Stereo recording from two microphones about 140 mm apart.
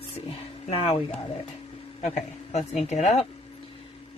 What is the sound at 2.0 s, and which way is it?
A man's voice, 55° left (ahead or behind).